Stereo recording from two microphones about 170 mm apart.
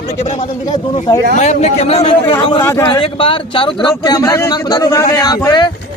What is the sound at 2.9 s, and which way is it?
A man's voice, 30° left (ahead or behind).